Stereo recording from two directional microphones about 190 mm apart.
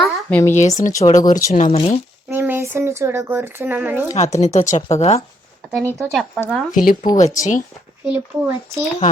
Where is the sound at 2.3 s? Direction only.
10° right (ahead or behind).